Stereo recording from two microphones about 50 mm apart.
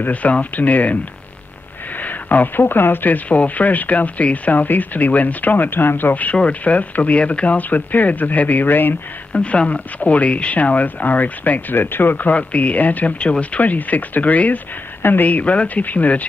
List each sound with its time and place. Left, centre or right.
0.0 s speech: left
2.0 s speech: left
3.3 s speech: left
6.6 s speech: left
9.4 s speech: left